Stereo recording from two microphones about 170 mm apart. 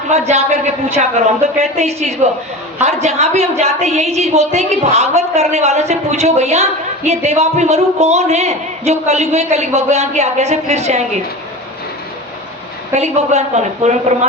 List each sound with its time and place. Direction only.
0.1 s a woman's voice: 40° right (ahead or behind)
12.9 s a woman's voice: 40° right (ahead or behind)